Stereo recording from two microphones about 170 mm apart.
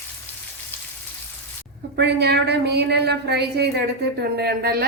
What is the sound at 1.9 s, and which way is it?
A woman's voice, 75° right (ahead or behind).